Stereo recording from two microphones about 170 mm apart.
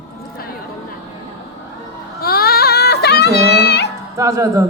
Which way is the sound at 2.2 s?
65° left (ahead or behind).